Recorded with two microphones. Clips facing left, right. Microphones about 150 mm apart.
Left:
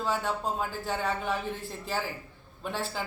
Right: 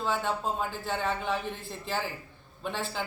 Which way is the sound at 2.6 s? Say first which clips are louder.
Even; 5° left (ahead or behind).